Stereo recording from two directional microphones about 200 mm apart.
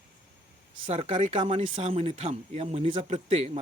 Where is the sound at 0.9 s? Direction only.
30° right (ahead or behind).